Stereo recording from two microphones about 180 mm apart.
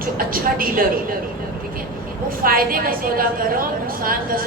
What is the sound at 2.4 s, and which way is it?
A woman's voice, 55° right (ahead or behind).